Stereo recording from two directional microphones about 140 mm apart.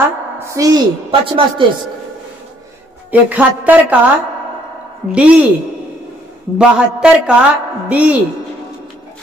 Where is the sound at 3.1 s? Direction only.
10° right (ahead or behind).